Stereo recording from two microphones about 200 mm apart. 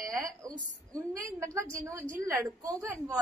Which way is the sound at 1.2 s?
15° right (ahead or behind).